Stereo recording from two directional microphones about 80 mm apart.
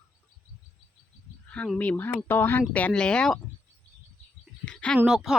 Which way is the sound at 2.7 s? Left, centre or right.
Centre.